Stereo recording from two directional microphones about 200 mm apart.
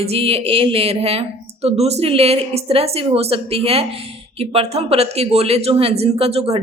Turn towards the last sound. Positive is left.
turn(degrees=-30)  # may be behind; listen again after turning